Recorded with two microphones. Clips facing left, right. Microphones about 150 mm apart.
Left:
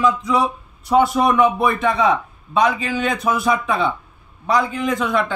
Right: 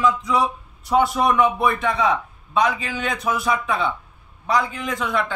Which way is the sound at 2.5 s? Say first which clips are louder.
Left 3 dB; 30° left (ahead or behind).